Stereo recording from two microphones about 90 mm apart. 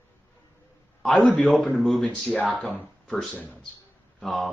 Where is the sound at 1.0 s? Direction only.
5° left (ahead or behind).